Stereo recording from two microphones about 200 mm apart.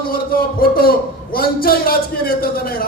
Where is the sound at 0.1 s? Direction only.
45° left (ahead or behind).